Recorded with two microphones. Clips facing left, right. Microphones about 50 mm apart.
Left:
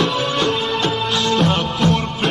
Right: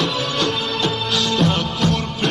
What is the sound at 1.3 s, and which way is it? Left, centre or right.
Music, centre.